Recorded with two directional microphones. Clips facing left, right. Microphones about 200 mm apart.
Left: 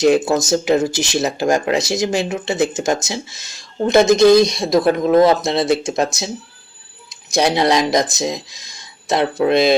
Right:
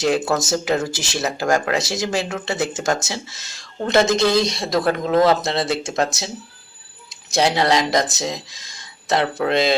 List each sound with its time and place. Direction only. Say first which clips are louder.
0.0 s speech: left 5 dB; 15° left (ahead or behind)